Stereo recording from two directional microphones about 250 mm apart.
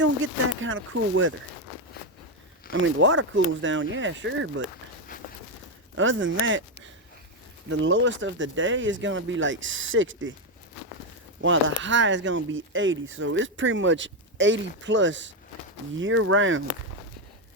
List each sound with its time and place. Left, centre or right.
0.6 s speech: right
2.7 s speech: right
6.0 s speech: right
11.3 s speech: right